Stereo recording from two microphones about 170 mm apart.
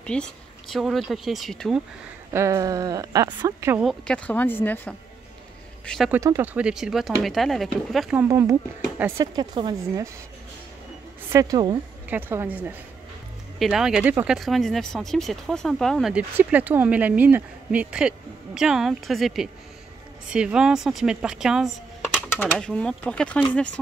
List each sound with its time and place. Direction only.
0.0 s speech: 5° left (ahead or behind)
2.3 s speech: 15° right (ahead or behind)
3.8 s speech: 5° left (ahead or behind)
5.9 s speech: centre (ahead or behind)
6.1 s speech: 15° right (ahead or behind)
8.2 s speech: 15° right (ahead or behind)
11.2 s speech: 20° right (ahead or behind)
12.1 s a woman's voice: 10° right (ahead or behind)
22.3 s speech: 10° left (ahead or behind)